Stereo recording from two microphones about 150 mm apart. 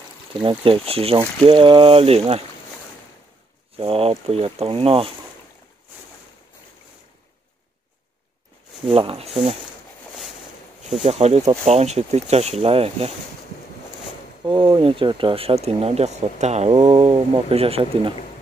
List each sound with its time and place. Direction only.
0.4 s speech: 35° right (ahead or behind)
3.7 s speech: 40° right (ahead or behind)
8.8 s speech: 40° right (ahead or behind)
11.1 s speech: 45° right (ahead or behind)
14.4 s speech: 35° right (ahead or behind)